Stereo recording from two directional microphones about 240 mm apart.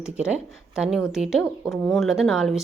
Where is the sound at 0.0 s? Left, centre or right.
Centre.